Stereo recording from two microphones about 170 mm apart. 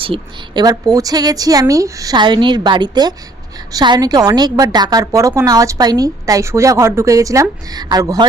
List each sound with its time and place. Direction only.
0.0 s a woman's voice: 30° right (ahead or behind)